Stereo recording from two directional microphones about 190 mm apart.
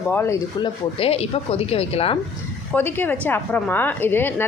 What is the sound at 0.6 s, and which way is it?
Speech, 30° left (ahead or behind).